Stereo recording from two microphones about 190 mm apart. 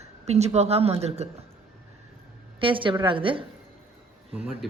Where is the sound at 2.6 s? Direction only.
25° right (ahead or behind).